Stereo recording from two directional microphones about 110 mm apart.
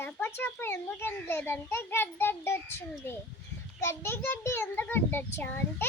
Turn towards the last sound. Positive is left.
turn(degrees=20)  # may be behind; listen again after turning